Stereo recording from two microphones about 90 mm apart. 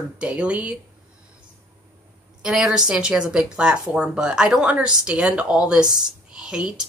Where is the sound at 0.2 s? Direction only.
15° right (ahead or behind).